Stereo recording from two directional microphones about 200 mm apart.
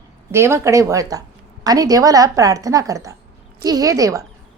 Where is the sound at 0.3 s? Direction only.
15° right (ahead or behind).